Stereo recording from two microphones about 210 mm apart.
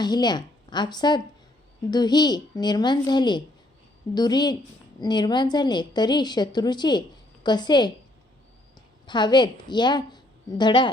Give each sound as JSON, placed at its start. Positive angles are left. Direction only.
{"t": 0.0, "sound": "a woman's voice", "side_deg": 20}
{"t": 9.0, "sound": "a woman's voice", "side_deg": 20}